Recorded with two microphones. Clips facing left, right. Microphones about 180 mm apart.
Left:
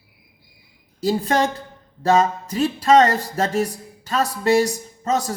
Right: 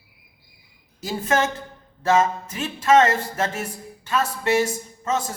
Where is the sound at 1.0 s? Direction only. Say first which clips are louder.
Left 3 dB; 35° left (ahead or behind).